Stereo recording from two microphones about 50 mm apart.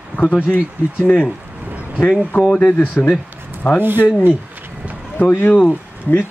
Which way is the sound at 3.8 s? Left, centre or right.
Right.